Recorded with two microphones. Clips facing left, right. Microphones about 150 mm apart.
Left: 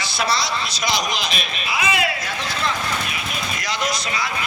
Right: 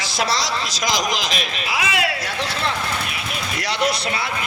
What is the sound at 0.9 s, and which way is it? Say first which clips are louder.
A man's voice: right 2 dB; 90° right.